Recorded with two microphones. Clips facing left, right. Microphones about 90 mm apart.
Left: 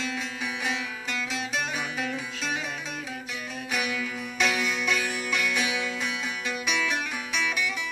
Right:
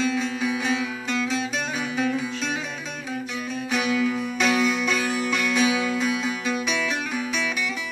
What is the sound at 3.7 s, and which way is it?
Music, 30° right (ahead or behind).